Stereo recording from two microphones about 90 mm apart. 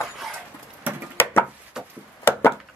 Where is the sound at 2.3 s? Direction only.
25° left (ahead or behind).